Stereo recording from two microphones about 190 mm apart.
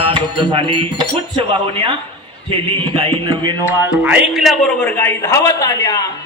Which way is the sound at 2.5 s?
25° right (ahead or behind).